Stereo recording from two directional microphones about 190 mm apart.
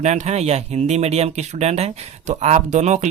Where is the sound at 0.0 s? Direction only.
35° right (ahead or behind).